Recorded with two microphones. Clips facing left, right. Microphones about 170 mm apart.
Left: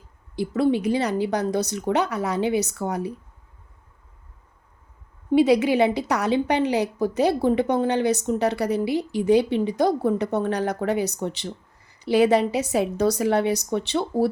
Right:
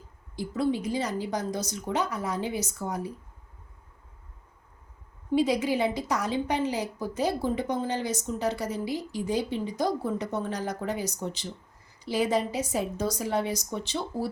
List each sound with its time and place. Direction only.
0.3 s a woman's voice: 70° left (ahead or behind)
5.3 s a woman's voice: 70° left (ahead or behind)